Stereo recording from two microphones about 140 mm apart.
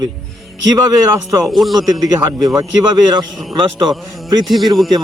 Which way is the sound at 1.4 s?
Centre (ahead or behind).